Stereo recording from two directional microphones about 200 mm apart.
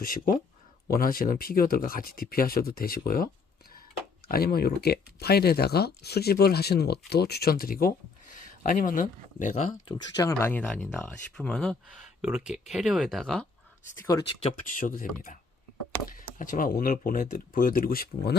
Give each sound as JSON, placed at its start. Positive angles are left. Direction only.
{"t": 0.0, "sound": "speech", "side_deg": 45}
{"t": 4.3, "sound": "speech", "side_deg": 50}
{"t": 9.8, "sound": "speech", "side_deg": 20}
{"t": 13.9, "sound": "speech", "side_deg": 15}
{"t": 14.8, "sound": "speech", "side_deg": 45}